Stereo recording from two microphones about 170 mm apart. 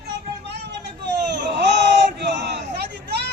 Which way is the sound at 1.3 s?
85° right.